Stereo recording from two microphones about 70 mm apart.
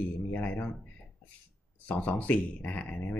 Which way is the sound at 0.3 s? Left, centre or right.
Left.